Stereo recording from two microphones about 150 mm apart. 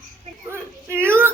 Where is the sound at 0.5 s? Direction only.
15° right (ahead or behind).